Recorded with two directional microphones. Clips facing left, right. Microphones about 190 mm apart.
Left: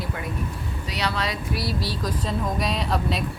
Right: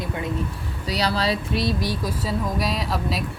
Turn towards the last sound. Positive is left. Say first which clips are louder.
# left 1 dB
turn(degrees=0)  # may be behind; listen again after turning